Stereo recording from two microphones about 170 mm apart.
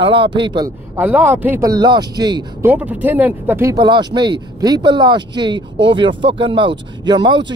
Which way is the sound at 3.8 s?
25° right (ahead or behind).